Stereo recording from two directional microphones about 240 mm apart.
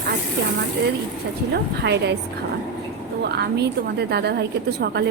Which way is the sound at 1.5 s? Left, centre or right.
Right.